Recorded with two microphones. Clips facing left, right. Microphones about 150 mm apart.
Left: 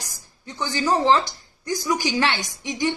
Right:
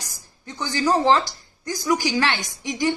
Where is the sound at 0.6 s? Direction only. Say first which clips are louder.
Right 1 dB; 15° left (ahead or behind).